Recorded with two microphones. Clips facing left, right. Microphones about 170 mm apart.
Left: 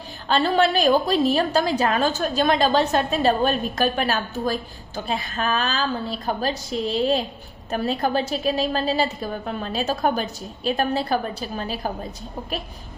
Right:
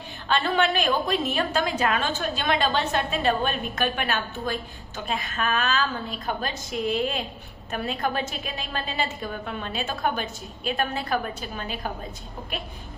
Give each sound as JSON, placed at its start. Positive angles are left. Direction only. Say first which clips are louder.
{"t": 0.3, "sound": "a woman's voice", "louder": "left 4 dB", "side_deg": 35}